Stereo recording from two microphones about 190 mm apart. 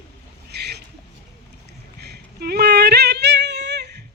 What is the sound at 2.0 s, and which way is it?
Singing, 55° right (ahead or behind).